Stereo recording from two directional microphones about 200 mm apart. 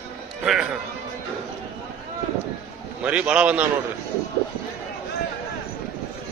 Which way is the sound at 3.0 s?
5° right (ahead or behind).